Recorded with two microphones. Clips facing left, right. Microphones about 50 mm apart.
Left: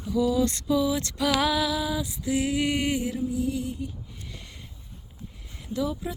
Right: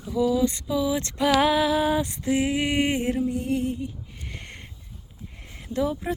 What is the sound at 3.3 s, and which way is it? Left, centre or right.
Female singing, right.